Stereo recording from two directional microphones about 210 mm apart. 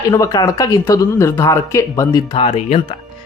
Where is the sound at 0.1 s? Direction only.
15° left (ahead or behind).